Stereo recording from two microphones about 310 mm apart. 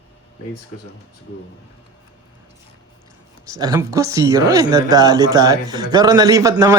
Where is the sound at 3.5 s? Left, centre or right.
Centre.